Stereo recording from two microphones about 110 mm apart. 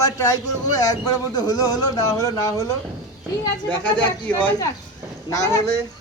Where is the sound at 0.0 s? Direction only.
30° left (ahead or behind).